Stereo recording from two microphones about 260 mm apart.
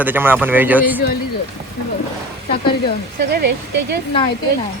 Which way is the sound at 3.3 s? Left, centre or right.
Right.